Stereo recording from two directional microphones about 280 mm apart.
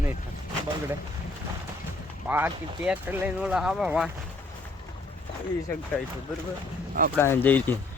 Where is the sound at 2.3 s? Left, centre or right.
Centre.